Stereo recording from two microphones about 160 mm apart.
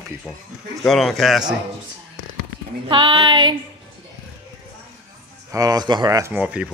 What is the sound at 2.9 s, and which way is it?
Female singing, 30° right (ahead or behind).